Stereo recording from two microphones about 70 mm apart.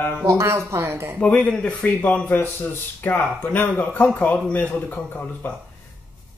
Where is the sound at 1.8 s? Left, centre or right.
Left.